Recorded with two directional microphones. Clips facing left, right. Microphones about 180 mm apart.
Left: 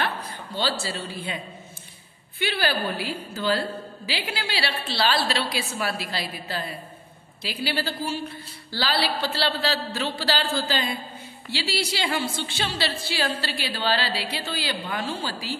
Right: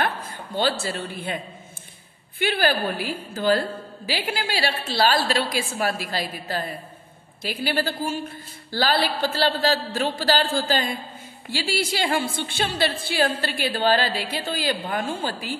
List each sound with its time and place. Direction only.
0.6 s a man's voice: 50° right (ahead or behind)